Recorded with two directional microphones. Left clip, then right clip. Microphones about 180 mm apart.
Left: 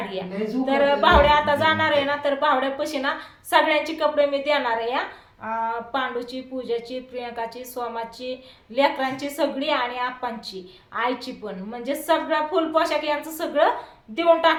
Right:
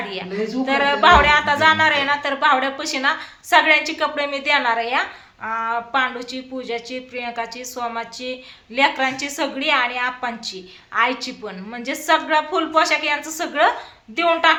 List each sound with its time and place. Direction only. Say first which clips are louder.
0.1 s speech: right 3 dB; 15° right (ahead or behind)